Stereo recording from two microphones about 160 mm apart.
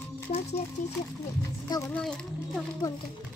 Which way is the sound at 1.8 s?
5° left (ahead or behind).